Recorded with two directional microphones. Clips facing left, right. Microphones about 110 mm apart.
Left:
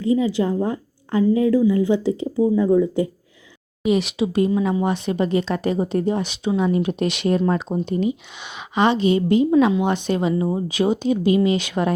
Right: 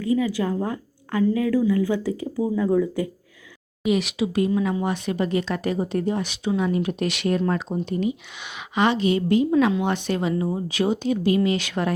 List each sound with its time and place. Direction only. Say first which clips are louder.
0.0 s speech: left 3 dB; 25° left (ahead or behind)